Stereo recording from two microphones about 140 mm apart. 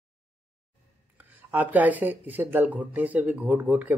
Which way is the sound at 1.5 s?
10° right (ahead or behind).